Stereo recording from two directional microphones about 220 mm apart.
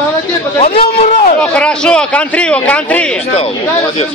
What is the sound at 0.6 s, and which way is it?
Speech, 25° left (ahead or behind).